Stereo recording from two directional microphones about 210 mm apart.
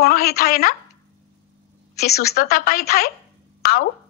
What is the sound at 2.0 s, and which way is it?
A woman's voice, 50° left (ahead or behind).